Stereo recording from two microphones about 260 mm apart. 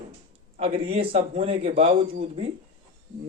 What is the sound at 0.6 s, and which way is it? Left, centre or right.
Speech, right.